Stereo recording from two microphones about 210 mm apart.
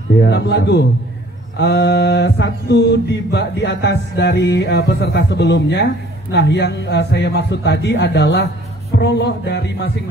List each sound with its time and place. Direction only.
0.2 s a man's voice: 55° left (ahead or behind)
1.6 s mantra: 55° left (ahead or behind)
6.3 s a man's voice: 55° left (ahead or behind)